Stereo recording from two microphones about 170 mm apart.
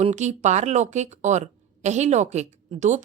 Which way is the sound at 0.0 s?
45° right (ahead or behind).